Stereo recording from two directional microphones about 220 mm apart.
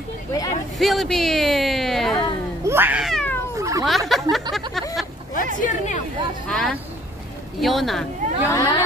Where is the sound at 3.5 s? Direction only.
15° right (ahead or behind).